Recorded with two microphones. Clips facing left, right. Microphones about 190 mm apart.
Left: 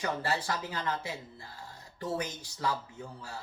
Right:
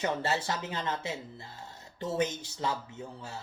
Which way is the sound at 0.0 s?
25° right (ahead or behind).